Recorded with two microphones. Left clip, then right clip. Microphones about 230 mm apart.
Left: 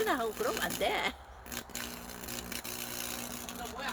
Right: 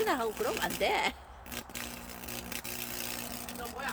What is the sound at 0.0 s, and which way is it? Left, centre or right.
Speech, centre.